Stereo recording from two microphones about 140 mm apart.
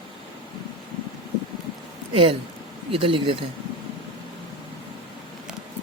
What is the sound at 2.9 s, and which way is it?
Speech, 40° right (ahead or behind).